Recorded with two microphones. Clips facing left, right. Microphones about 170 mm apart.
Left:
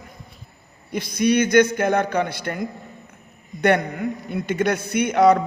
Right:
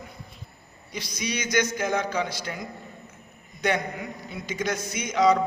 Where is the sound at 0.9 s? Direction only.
55° left (ahead or behind).